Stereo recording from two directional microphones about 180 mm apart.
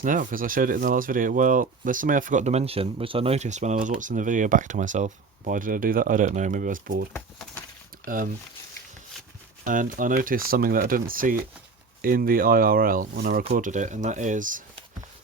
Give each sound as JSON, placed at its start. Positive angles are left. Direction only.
{"t": 0.0, "sound": "speech", "side_deg": -50}
{"t": 7.1, "sound": "speech", "side_deg": 10}
{"t": 8.0, "sound": "speech", "side_deg": -50}
{"t": 9.6, "sound": "speech", "side_deg": -45}
{"t": 13.4, "sound": "speech", "side_deg": -40}